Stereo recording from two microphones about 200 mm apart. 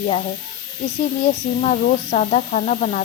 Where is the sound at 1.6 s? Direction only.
35° left (ahead or behind).